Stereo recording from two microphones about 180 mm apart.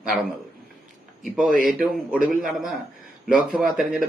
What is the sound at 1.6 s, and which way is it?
A man's voice, 5° right (ahead or behind).